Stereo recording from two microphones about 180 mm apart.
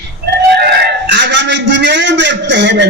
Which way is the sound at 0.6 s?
65° right (ahead or behind).